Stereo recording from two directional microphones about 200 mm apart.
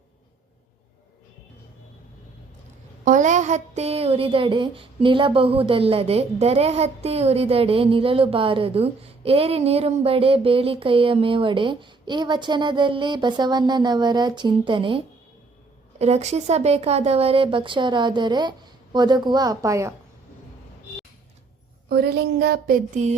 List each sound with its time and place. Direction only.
3.0 s a woman's voice: 40° right (ahead or behind); by 19.9 s 15° right (ahead or behind)
21.8 s speech: 55° right (ahead or behind)